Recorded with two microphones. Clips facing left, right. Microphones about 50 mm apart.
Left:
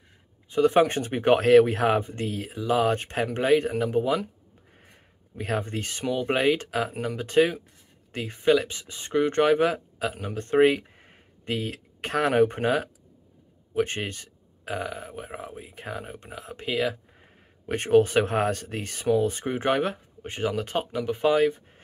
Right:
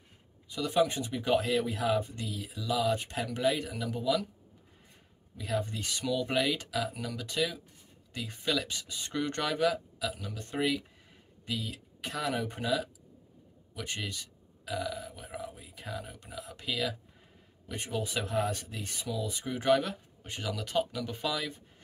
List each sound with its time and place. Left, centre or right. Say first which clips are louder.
0.5 s speech: left 8 dB; left
4.7 s a man's voice: left 4 dB; left